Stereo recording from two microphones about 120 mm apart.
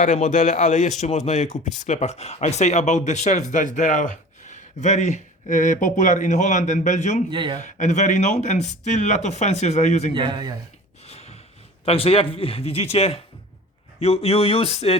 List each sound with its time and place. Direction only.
0.0 s speech: 90° left
7.3 s speech: 45° right (ahead or behind)
7.6 s speech: 85° left
10.1 s speech: 45° right (ahead or behind)
11.0 s a sound: 60° left (ahead or behind)
11.9 s a man's voice: 55° left (ahead or behind)